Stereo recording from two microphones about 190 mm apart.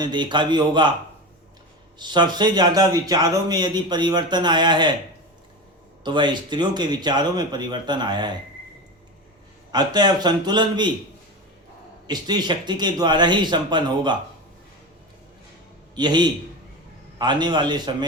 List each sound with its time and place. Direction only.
0.0 s speech: 25° right (ahead or behind)
2.0 s speech: 25° right (ahead or behind)
6.0 s speech: 25° right (ahead or behind)
9.7 s speech: 20° right (ahead or behind)
12.0 s speech: 20° right (ahead or behind)
16.0 s speech: 25° right (ahead or behind)